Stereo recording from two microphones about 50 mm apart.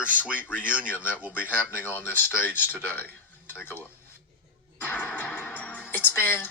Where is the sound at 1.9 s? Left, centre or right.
Left.